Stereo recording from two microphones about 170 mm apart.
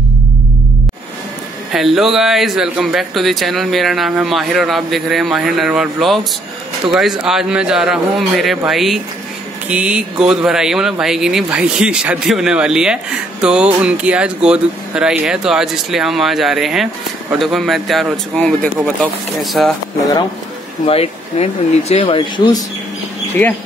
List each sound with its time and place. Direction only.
1.7 s speech: centre (ahead or behind)
20.8 s speech: 35° left (ahead or behind)
23.4 s speech: 10° left (ahead or behind)